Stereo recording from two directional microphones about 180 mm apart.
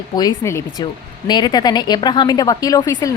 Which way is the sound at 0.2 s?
20° left (ahead or behind).